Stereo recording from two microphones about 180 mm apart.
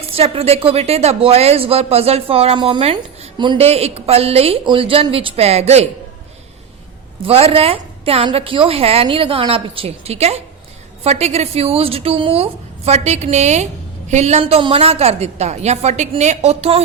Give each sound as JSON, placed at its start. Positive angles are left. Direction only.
{"t": 0.1, "sound": "speech", "side_deg": -35}
{"t": 7.2, "sound": "speech", "side_deg": -35}